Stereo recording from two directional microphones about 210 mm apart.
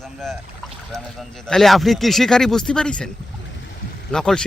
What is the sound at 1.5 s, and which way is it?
Speech, centre (ahead or behind).